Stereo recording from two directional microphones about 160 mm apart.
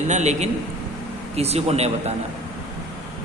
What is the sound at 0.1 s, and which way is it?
A man's voice, 45° right (ahead or behind).